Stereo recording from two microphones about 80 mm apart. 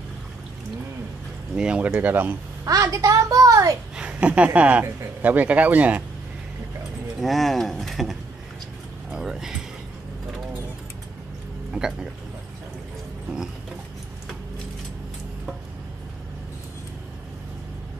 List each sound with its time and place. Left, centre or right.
1.5 s speech: centre
2.6 s a woman's voice: right
3.9 s speech: centre
7.2 s speech: centre
9.1 s a sound: centre
11.7 s speech: centre